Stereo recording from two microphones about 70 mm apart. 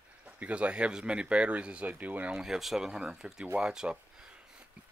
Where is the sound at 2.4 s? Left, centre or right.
Centre.